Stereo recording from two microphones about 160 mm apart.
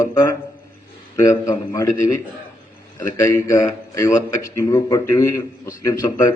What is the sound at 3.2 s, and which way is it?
A man's voice, 20° left (ahead or behind).